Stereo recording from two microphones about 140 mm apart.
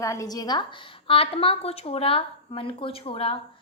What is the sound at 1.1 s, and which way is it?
A woman's voice, 40° left (ahead or behind).